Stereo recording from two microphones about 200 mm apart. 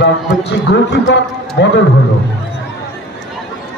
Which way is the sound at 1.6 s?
60° left (ahead or behind).